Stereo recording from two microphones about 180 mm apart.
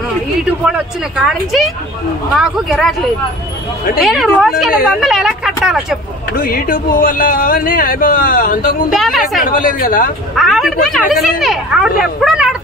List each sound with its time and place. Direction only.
0.7 s speech: centre (ahead or behind)
4.0 s speech: centre (ahead or behind)
6.3 s speech: 55° left (ahead or behind)
8.9 s speech: centre (ahead or behind)
9.4 s speech: 50° left (ahead or behind)
10.3 s speech: centre (ahead or behind)